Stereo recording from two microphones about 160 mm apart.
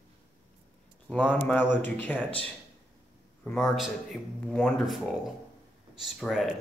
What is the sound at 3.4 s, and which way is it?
Speech, 5° left (ahead or behind).